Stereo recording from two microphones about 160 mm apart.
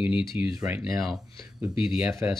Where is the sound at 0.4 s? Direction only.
10° right (ahead or behind).